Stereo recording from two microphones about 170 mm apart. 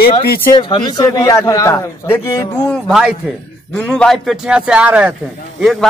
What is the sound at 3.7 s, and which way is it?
A man's voice, 5° left (ahead or behind).